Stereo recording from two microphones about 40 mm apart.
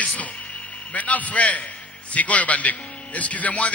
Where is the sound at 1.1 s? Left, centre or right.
Left.